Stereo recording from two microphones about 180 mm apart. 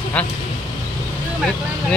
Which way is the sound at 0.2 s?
5° left (ahead or behind).